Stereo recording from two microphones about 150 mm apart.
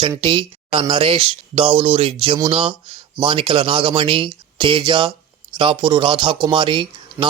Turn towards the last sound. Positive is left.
turn(degrees=-20)  # may be behind; listen again after turning